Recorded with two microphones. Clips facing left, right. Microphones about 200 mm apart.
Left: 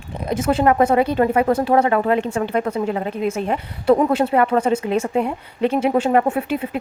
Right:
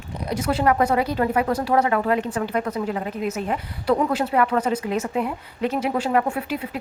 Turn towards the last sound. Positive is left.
turn(degrees=25)  # may be behind; listen again after turning